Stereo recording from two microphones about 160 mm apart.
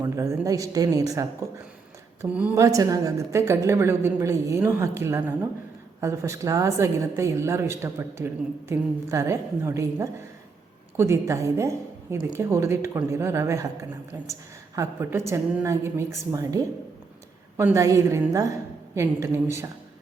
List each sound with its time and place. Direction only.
0.0 s a woman's voice: 20° right (ahead or behind)
2.2 s a woman's voice: 5° right (ahead or behind)
2.6 s a woman's voice: 20° right (ahead or behind)
14.8 s a woman's voice: 15° right (ahead or behind)